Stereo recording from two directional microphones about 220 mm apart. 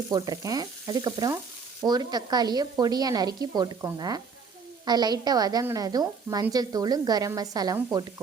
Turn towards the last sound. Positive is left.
turn(degrees=-15)  # may be behind; listen again after turning